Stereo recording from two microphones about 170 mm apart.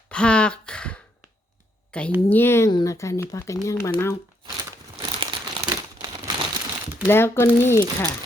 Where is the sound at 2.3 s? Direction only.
15° left (ahead or behind).